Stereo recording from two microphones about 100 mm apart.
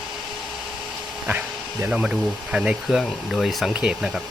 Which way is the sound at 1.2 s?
15° right (ahead or behind).